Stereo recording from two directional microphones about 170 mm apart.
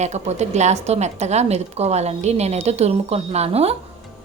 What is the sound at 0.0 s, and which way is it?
A woman's voice, 40° right (ahead or behind).